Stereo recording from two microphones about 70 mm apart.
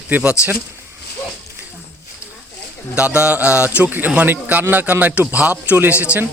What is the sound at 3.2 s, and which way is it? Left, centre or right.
A man's voice, right.